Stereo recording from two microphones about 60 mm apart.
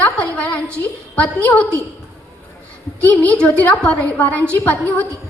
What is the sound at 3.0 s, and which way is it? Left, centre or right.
A woman's voice, left.